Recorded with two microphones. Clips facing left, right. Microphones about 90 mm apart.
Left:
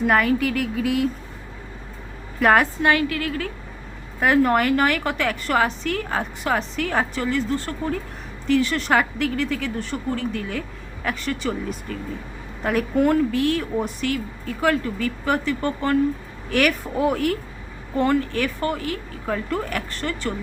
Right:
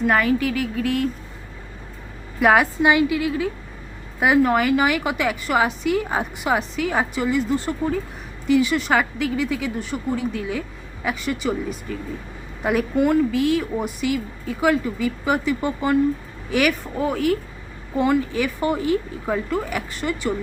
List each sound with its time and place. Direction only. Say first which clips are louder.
0.0 s a woman's voice: even; centre (ahead or behind)
2.4 s a woman's voice: right 1 dB; 5° right (ahead or behind)
18.7 s speech: right 5 dB; 20° right (ahead or behind)
19.2 s a woman's voice: right 2 dB; 5° right (ahead or behind)